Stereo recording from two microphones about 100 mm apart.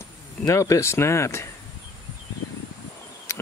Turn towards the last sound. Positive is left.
turn(degrees=30)  # may be behind; listen again after turning